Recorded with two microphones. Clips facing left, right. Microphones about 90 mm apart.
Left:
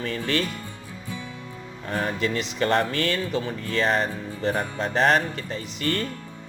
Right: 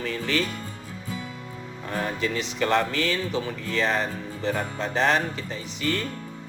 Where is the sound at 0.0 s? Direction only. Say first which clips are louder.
Left 1 dB; 40° left (ahead or behind).